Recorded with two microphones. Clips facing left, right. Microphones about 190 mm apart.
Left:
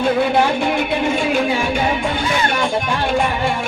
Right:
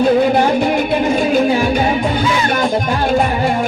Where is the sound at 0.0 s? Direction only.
40° right (ahead or behind).